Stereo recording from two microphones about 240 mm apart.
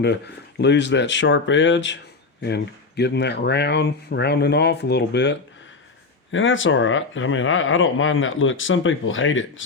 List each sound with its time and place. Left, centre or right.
0.6 s speech: left